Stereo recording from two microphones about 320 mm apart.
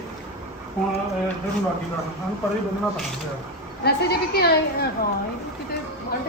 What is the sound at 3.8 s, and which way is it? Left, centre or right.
A woman's voice, left.